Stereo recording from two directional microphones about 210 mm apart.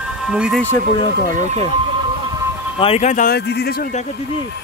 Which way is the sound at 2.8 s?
30° left (ahead or behind).